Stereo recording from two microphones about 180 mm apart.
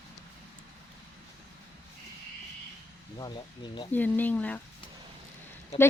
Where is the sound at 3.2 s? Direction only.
25° left (ahead or behind).